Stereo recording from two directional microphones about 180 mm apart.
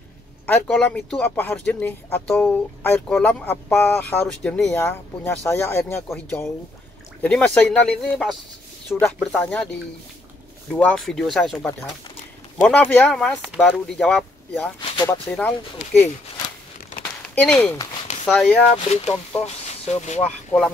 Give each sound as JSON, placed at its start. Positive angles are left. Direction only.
{"t": 0.5, "sound": "speech", "side_deg": 5}
{"t": 10.7, "sound": "speech", "side_deg": 5}
{"t": 14.8, "sound": "a sound", "side_deg": 30}
{"t": 15.0, "sound": "speech", "side_deg": 5}
{"t": 17.2, "sound": "speech", "side_deg": 10}
{"t": 18.8, "sound": "speech", "side_deg": 35}